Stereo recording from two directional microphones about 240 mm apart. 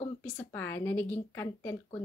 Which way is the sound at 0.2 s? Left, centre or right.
Centre.